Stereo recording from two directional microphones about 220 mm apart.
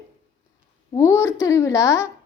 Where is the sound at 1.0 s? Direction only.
10° left (ahead or behind).